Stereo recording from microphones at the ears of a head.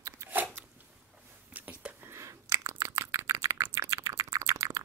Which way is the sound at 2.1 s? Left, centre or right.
Right.